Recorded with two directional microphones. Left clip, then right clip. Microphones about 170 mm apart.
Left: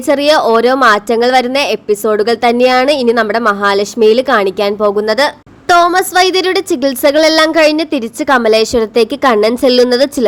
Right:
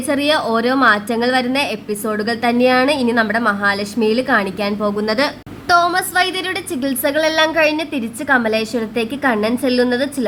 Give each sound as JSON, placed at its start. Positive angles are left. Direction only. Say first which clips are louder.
{"t": 0.1, "sound": "a woman's voice", "louder": "left 8 dB", "side_deg": 40}